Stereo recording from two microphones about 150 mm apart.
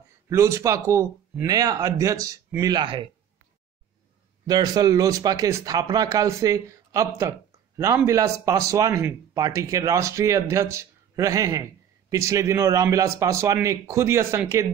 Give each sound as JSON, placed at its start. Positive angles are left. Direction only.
{"t": 0.3, "sound": "speech", "side_deg": -20}
{"t": 4.5, "sound": "speech", "side_deg": -25}